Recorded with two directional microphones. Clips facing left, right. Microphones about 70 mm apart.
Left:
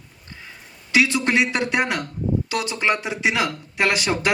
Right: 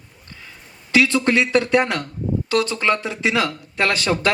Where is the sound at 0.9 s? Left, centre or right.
Left.